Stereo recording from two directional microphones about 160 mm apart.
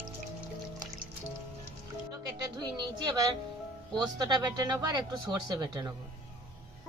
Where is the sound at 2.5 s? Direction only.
25° right (ahead or behind).